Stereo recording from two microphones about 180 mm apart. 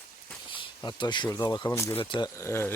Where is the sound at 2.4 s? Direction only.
15° left (ahead or behind).